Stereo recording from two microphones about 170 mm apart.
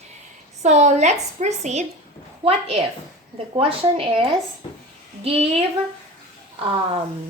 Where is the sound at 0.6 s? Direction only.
45° right (ahead or behind).